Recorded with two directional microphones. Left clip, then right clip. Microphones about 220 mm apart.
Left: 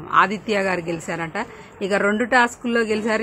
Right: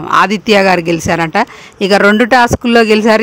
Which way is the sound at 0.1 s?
50° right (ahead or behind).